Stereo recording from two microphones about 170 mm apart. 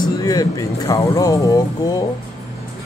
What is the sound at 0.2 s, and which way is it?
Speech, 20° left (ahead or behind).